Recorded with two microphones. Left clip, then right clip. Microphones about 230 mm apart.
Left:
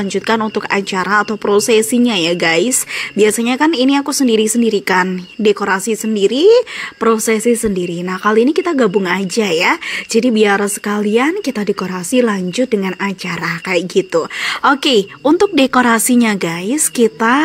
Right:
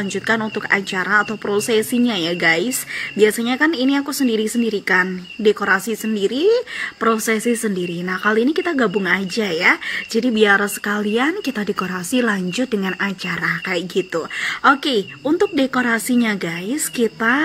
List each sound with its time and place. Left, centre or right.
0.0 s speech: left